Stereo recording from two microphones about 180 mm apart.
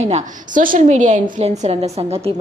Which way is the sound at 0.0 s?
40° right (ahead or behind).